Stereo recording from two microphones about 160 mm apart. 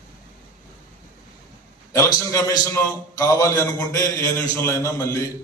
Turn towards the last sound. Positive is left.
turn(degrees=20)  # may be behind; listen again after turning